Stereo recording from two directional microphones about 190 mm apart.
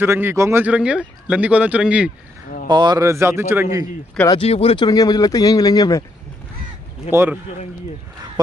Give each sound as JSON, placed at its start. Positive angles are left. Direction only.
{"t": 0.0, "sound": "a man's voice", "side_deg": -10}
{"t": 2.7, "sound": "a man's voice", "side_deg": -20}
{"t": 4.3, "sound": "speech", "side_deg": 30}
{"t": 7.1, "sound": "a man's voice", "side_deg": -10}